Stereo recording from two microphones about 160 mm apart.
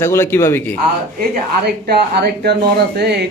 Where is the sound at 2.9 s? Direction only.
90° right.